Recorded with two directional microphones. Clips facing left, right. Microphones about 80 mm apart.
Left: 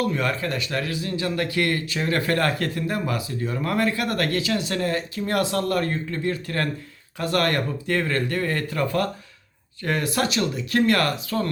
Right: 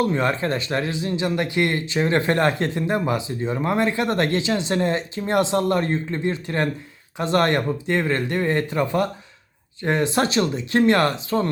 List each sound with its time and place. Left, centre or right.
0.0 s speech: right